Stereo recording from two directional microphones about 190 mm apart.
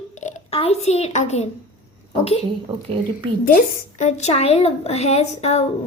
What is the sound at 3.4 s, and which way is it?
A woman's voice, 40° left (ahead or behind).